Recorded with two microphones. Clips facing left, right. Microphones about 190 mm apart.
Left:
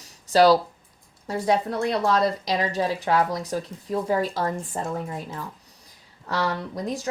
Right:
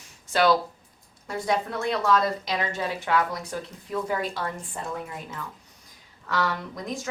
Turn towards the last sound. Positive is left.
turn(degrees=35)  # may be behind; listen again after turning